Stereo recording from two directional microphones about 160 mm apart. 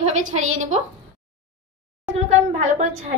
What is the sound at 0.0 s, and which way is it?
Speech, 45° right (ahead or behind).